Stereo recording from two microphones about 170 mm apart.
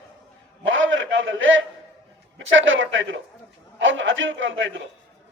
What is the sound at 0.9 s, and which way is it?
Speech, 90° right.